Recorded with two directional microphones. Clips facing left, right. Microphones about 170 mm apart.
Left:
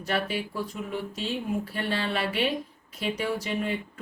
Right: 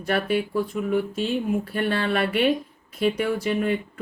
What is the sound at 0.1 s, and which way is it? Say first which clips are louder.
Speech: right 6 dB; 55° right (ahead or behind).